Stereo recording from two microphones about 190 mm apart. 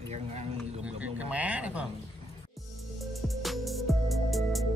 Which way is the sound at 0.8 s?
5° right (ahead or behind).